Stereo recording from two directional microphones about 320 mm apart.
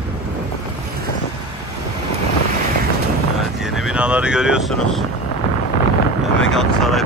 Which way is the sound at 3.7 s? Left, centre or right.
Centre.